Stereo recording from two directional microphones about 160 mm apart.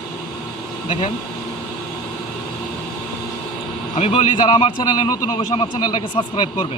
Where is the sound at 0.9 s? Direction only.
35° left (ahead or behind).